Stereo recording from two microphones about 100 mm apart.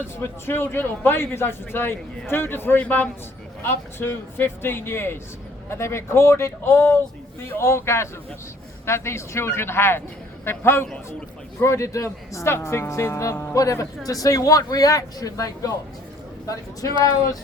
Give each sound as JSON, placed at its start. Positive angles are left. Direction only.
{"t": 0.2, "sound": "a man's voice", "side_deg": 20}